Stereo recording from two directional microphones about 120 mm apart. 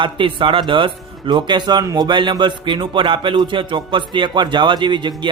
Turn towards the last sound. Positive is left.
turn(degrees=-40)  # may be behind; listen again after turning